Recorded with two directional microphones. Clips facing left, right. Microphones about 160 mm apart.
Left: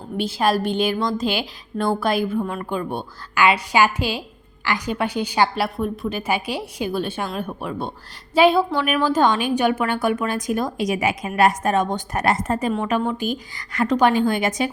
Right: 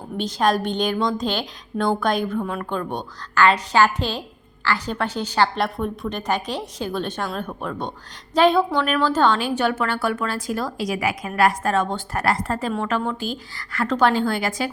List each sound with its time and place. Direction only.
0.2 s a woman's voice: 5° left (ahead or behind)